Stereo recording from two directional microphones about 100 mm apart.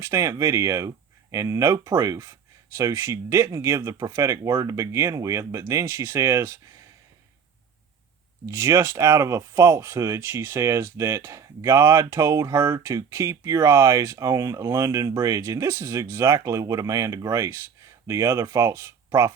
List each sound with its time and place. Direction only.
0.0 s speech: 30° right (ahead or behind)
8.4 s speech: 25° right (ahead or behind)